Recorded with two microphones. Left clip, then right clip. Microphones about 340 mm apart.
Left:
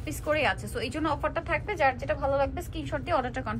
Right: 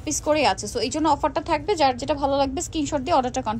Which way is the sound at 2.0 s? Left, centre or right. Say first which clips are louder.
Right 5 dB; right.